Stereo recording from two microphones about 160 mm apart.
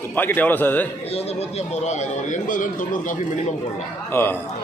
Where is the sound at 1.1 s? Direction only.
40° left (ahead or behind).